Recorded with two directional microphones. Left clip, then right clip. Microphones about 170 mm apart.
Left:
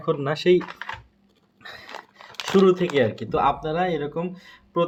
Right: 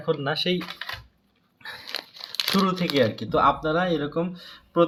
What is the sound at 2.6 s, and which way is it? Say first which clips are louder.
Speech: left 5 dB; 45° left (ahead or behind).